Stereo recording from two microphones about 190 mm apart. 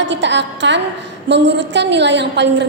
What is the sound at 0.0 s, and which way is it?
A woman's voice, 70° right (ahead or behind).